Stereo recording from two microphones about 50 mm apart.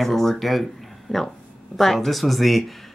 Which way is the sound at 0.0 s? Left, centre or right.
Centre.